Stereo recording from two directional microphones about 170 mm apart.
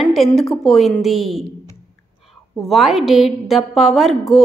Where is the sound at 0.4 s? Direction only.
Centre (ahead or behind).